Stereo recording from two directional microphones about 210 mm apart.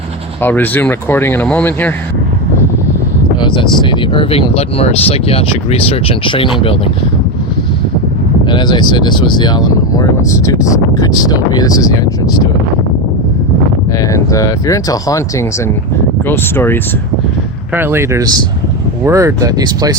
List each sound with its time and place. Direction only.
0.4 s speech: 10° left (ahead or behind)
3.4 s speech: 20° left (ahead or behind)
8.4 s speech: 20° left (ahead or behind)
14.0 s speech: 15° left (ahead or behind)
17.7 s speech: 10° right (ahead or behind)